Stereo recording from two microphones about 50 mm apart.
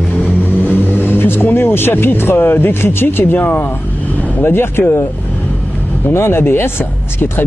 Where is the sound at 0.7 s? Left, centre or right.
Left.